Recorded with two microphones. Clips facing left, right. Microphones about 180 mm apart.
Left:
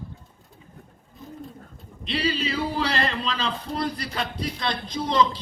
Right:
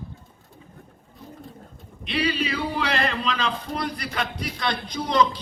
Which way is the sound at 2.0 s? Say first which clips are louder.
Right 1 dB; 30° left (ahead or behind).